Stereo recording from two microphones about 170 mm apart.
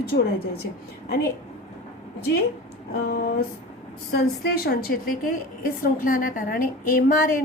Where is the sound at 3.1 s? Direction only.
65° left (ahead or behind).